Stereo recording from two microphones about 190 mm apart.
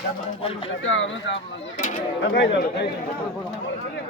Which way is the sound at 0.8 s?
80° left.